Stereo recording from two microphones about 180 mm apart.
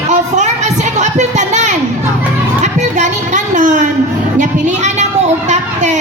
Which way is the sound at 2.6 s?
40° right (ahead or behind).